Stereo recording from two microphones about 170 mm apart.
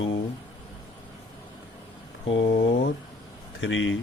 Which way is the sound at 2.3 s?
65° left (ahead or behind).